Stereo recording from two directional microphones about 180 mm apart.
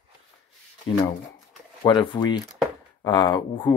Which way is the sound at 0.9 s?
25° left (ahead or behind).